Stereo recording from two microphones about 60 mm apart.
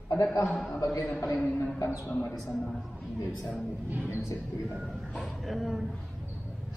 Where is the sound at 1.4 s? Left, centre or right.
Left.